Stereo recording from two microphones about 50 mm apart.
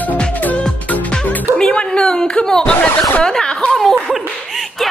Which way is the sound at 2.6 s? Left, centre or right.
Left.